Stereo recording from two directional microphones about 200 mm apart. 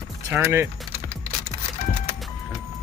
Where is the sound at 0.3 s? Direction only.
10° right (ahead or behind).